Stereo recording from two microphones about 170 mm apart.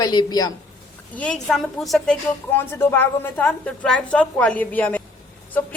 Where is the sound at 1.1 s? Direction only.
5° left (ahead or behind).